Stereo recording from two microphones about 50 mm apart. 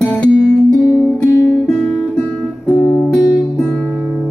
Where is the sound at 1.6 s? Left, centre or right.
Centre.